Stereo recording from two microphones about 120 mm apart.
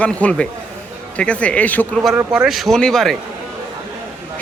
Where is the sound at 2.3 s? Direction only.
5° right (ahead or behind).